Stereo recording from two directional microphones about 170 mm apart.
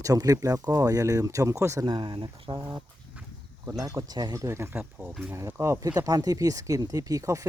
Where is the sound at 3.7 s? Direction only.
20° right (ahead or behind).